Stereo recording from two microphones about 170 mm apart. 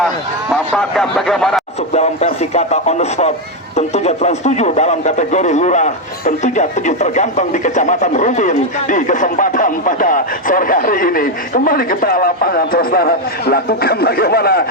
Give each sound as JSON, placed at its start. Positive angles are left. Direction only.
{"t": 0.5, "sound": "speech", "side_deg": 5}
{"t": 1.9, "sound": "speech", "side_deg": 40}